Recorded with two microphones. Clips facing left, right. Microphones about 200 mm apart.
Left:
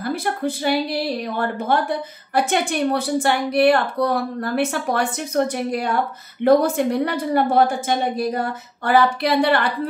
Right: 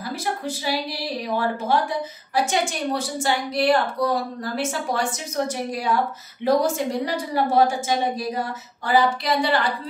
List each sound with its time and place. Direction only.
0.0 s a woman's voice: 55° left (ahead or behind)